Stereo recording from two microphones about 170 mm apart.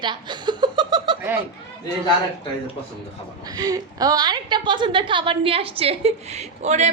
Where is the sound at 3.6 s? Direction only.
20° right (ahead or behind).